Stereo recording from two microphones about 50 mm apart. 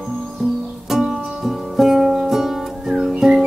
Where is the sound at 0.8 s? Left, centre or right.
Centre.